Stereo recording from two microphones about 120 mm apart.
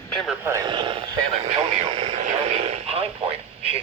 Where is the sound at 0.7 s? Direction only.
45° right (ahead or behind).